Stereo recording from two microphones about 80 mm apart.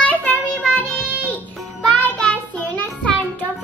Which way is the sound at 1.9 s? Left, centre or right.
Centre.